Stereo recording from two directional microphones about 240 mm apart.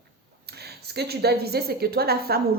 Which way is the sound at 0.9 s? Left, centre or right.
Right.